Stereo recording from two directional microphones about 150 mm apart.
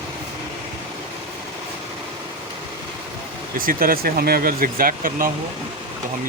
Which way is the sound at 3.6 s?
70° right (ahead or behind).